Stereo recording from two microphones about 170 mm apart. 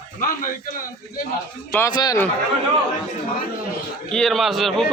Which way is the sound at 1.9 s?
20° left (ahead or behind).